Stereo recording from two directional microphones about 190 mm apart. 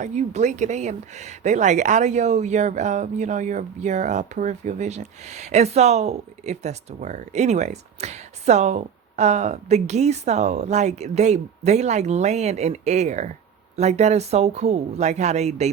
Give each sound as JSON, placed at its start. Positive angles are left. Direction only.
{"t": 0.0, "sound": "speech", "side_deg": -35}